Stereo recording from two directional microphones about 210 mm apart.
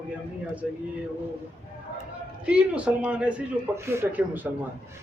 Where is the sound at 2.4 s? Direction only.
5° right (ahead or behind).